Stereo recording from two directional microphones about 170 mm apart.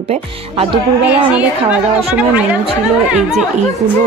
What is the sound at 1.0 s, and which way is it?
Speech, 10° right (ahead or behind).